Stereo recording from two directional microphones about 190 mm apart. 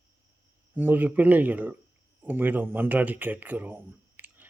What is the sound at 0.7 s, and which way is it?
Speech, 10° right (ahead or behind).